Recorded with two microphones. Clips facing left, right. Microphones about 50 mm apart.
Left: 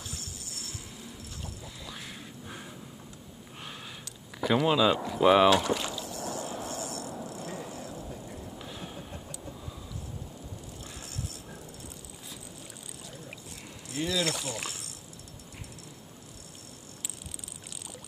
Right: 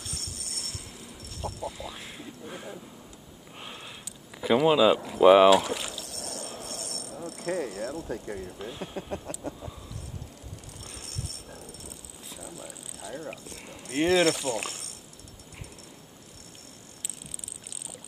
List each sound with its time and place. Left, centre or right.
0.0 s a sound: right
1.8 s speech: centre
3.5 s a sound: centre
4.4 s speech: centre
6.0 s a sound: right
6.4 s a sound: centre
6.7 s cricket: right
7.0 s cricket: centre
7.2 s mechanisms: right
8.5 s speech: centre
9.1 s vehicle: right
11.0 s dog: right
13.8 s speech: right
14.4 s speech: right